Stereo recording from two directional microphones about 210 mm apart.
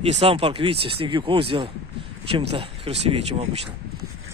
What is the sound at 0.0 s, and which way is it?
Speech, 30° right (ahead or behind).